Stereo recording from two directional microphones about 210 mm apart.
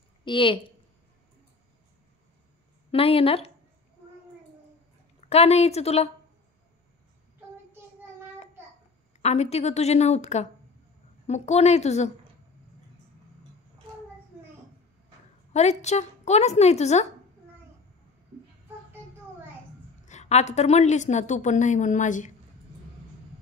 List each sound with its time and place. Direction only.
0.2 s a woman's voice: 25° left (ahead or behind)
2.9 s speech: 25° left (ahead or behind)
5.3 s speech: 30° left (ahead or behind)
9.2 s a woman's voice: 30° left (ahead or behind)
15.8 s a woman's voice: 30° left (ahead or behind)
20.1 s a woman's voice: 30° left (ahead or behind)